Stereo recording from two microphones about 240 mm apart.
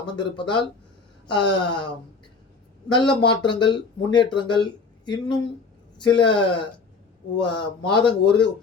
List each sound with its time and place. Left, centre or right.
0.0 s speech: centre
2.9 s speech: centre